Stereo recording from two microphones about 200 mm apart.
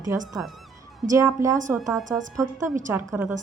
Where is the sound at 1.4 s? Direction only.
15° right (ahead or behind).